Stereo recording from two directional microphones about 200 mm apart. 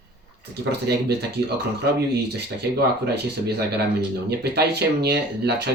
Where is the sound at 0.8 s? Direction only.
55° right (ahead or behind).